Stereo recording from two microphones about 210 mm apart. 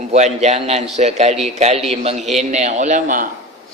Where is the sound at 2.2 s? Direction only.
Centre (ahead or behind).